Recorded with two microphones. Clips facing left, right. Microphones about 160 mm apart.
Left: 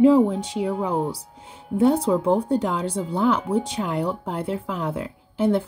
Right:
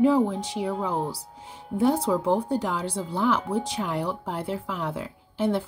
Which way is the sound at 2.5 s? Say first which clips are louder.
Left 4 dB; 20° left (ahead or behind).